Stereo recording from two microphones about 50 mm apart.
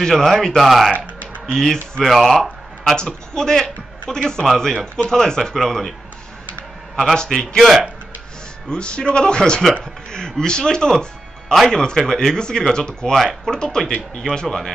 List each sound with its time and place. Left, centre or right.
0.0 s speech: centre
1.5 s speech: centre
2.0 s speech: centre
2.4 s a sound: centre
3.0 s speech: centre
7.2 s speech: centre
8.6 s a man's voice: centre